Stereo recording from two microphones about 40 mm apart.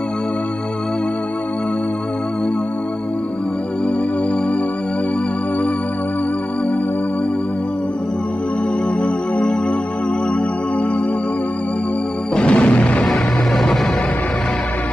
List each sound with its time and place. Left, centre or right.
12.4 s music: left
13.0 s music: centre